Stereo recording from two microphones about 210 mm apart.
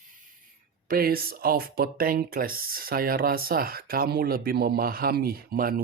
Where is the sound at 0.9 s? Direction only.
45° right (ahead or behind).